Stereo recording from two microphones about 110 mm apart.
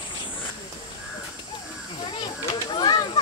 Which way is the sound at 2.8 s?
40° left (ahead or behind).